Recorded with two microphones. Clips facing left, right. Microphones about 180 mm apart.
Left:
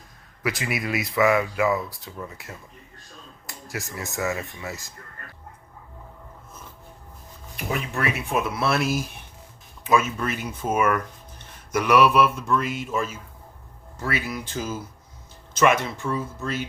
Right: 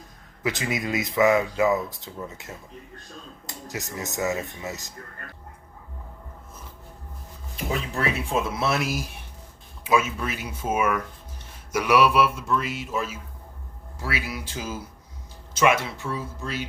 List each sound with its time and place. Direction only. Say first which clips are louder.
0.4 s speech: even; 20° right (ahead or behind)
7.5 s speech: even; 30° right (ahead or behind)
9.9 s speech: left 1 dB; 10° right (ahead or behind)
12.5 s speech: left 2 dB; 50° left (ahead or behind)
14.2 s speech: left 3 dB; 10° right (ahead or behind)
16.1 s speech: left 3 dB; 50° left (ahead or behind)